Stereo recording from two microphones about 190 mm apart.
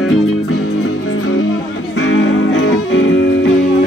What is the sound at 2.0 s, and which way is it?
Music, 85° left.